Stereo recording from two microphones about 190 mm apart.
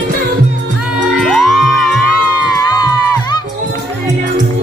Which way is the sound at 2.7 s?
20° left (ahead or behind).